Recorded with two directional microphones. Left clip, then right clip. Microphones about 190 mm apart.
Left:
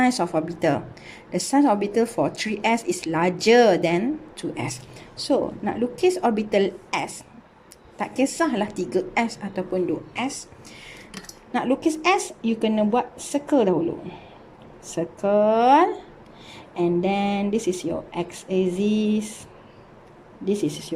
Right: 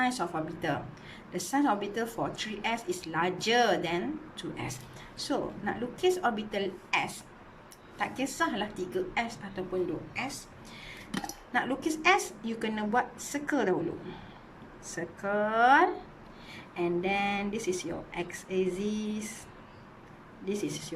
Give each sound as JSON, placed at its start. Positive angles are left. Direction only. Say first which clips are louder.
{"t": 0.0, "sound": "a woman's voice", "louder": "left 9 dB", "side_deg": 30}
{"t": 11.5, "sound": "a woman's voice", "louder": "left 8 dB", "side_deg": 25}
{"t": 20.4, "sound": "a woman's voice", "louder": "left 9 dB", "side_deg": 20}